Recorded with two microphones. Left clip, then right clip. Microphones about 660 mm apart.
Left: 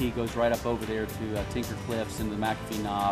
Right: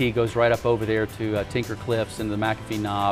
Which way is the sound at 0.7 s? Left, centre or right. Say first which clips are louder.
Right 8 dB; right.